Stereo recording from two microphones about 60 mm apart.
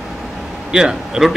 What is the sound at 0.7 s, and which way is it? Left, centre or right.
Speech, centre.